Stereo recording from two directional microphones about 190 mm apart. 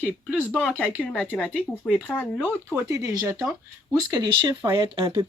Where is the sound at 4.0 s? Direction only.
20° right (ahead or behind).